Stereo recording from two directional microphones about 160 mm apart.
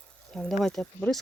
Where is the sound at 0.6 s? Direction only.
5° left (ahead or behind).